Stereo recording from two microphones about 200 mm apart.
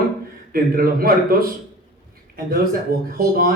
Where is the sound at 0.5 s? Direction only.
50° right (ahead or behind).